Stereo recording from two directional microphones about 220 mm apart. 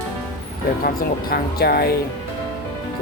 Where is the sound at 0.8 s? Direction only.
45° left (ahead or behind).